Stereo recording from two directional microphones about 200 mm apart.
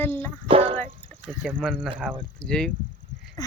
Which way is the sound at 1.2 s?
5° right (ahead or behind).